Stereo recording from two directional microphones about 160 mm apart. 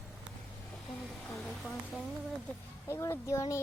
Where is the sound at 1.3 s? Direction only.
Centre (ahead or behind).